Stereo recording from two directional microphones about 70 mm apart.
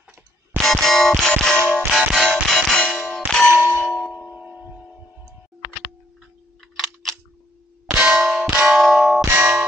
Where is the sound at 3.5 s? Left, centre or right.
Right.